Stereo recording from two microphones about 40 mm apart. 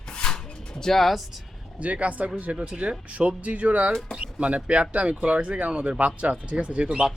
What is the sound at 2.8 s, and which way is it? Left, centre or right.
Speech, right.